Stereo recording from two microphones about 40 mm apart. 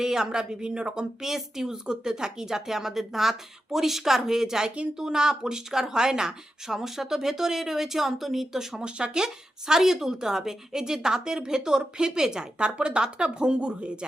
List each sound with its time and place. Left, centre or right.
0.0 s speech: centre
8.8 s speech: right